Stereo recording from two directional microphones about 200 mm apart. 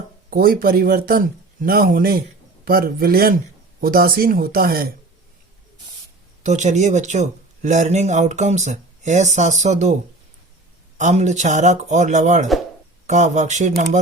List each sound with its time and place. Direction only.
0.3 s speech: 45° right (ahead or behind)
6.4 s speech: 35° right (ahead or behind)
10.9 s speech: 35° right (ahead or behind)